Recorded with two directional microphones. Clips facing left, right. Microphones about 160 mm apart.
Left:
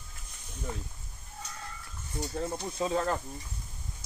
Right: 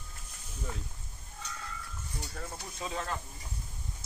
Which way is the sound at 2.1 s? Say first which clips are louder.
Left 9 dB; 25° left (ahead or behind).